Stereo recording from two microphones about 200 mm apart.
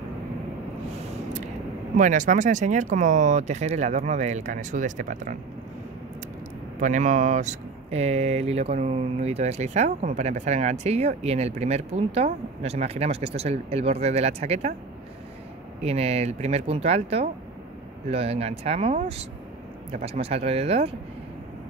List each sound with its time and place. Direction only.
2.0 s speech: 40° right (ahead or behind)
6.8 s speech: 40° right (ahead or behind)
15.8 s speech: 30° right (ahead or behind)